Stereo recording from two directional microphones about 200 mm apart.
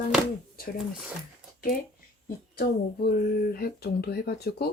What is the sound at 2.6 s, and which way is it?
Speech, 50° left (ahead or behind).